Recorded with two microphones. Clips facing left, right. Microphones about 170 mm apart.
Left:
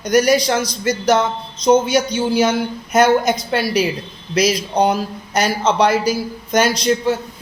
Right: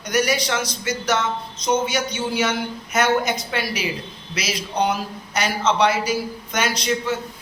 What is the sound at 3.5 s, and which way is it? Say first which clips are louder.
A man's voice: left 7 dB; 35° left (ahead or behind).